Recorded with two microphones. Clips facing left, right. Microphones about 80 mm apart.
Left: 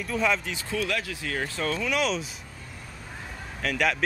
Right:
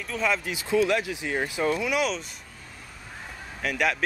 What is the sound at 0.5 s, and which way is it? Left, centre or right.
Speech, centre.